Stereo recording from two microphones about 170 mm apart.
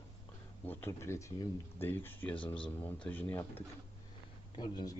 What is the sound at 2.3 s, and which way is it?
Speech, 30° left (ahead or behind).